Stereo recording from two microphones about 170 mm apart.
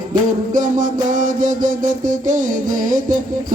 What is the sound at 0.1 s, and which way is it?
Music, 50° right (ahead or behind).